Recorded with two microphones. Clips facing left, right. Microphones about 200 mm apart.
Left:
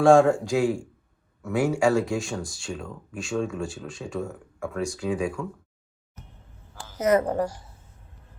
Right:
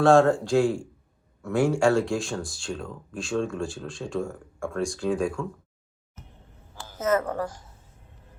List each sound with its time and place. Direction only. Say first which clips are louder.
0.0 s speech: left 1 dB; 10° left (ahead or behind)
7.0 s speech: left 3 dB; 15° left (ahead or behind)